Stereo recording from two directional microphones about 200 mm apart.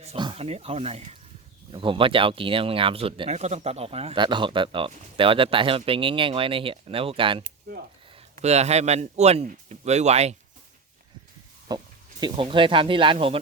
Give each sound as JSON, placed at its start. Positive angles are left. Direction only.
{"t": 0.0, "sound": "speech", "side_deg": -25}
{"t": 7.7, "sound": "a sound", "side_deg": -50}
{"t": 8.1, "sound": "a man's voice", "side_deg": -35}
{"t": 11.7, "sound": "speech", "side_deg": -20}